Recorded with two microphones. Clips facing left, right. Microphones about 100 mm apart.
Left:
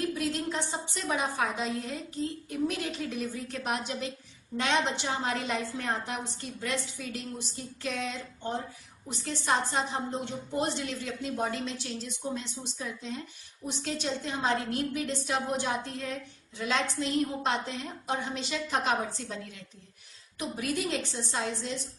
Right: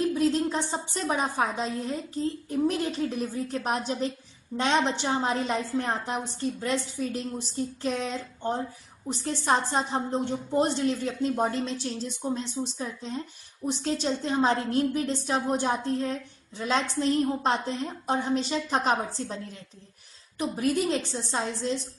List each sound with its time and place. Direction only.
0.1 s a woman's voice: 30° right (ahead or behind)
20.3 s a woman's voice: 35° right (ahead or behind)